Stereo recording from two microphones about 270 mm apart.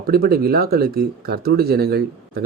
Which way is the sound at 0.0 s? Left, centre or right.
Right.